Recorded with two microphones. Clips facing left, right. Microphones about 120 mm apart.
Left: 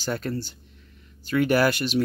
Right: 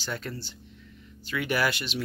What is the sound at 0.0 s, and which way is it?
Speech, 45° left (ahead or behind).